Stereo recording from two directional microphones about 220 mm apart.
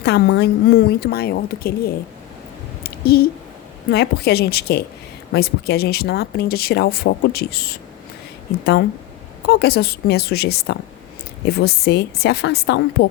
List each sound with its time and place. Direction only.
0.0 s speech: 50° left (ahead or behind)
2.8 s a sound: 45° left (ahead or behind)
3.8 s speech: 45° left (ahead or behind)
9.5 s speech: 45° left (ahead or behind)